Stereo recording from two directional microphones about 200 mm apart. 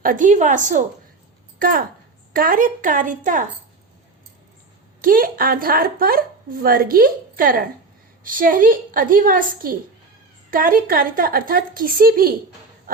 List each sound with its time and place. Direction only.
0.0 s a woman's voice: 40° right (ahead or behind)
4.9 s a woman's voice: 45° right (ahead or behind)